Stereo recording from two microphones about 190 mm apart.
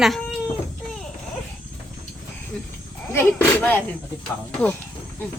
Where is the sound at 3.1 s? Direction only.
10° left (ahead or behind).